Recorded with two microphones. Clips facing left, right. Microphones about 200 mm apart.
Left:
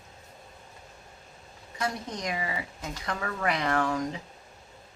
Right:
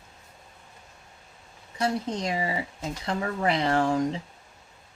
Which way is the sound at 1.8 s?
30° right (ahead or behind).